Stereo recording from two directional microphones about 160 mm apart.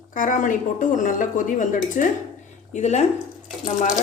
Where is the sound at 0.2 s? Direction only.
55° left (ahead or behind).